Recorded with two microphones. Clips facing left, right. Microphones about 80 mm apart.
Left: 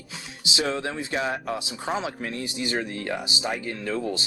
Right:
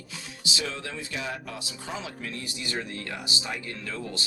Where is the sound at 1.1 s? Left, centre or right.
Left.